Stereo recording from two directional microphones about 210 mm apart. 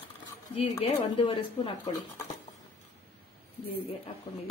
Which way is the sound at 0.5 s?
25° left (ahead or behind).